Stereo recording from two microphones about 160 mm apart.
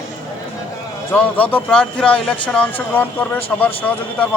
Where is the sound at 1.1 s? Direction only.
10° left (ahead or behind).